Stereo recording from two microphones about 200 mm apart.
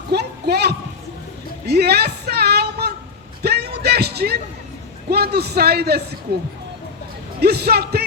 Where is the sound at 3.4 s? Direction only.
55° right (ahead or behind).